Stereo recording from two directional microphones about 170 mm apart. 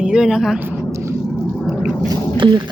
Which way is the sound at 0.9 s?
15° right (ahead or behind).